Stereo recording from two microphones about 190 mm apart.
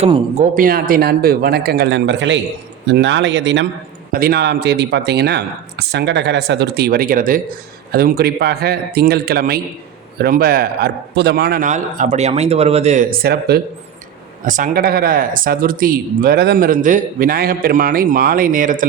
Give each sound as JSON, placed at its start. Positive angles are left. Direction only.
{"t": 0.0, "sound": "speech", "side_deg": -35}
{"t": 4.1, "sound": "speech", "side_deg": -55}
{"t": 14.4, "sound": "speech", "side_deg": -45}